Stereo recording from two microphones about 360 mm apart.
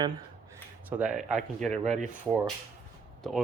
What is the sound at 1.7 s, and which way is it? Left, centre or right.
Speech, centre.